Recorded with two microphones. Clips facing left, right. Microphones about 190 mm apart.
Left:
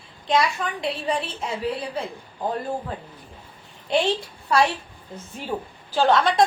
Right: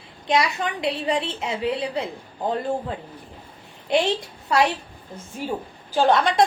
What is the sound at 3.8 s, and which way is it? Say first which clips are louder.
Speech: right 1 dB; 20° right (ahead or behind).